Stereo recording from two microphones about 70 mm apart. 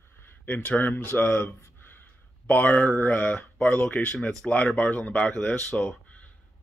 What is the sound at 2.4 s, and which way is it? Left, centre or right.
Speech, left.